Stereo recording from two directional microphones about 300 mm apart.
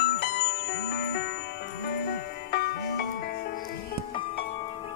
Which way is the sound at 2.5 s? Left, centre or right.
Left.